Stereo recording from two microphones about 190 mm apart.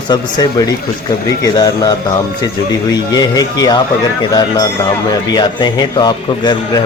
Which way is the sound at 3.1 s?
20° left (ahead or behind).